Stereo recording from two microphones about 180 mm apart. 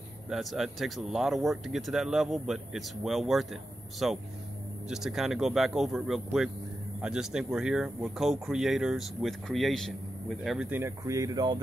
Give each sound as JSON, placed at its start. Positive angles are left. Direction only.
{"t": 0.3, "sound": "speech", "side_deg": 0}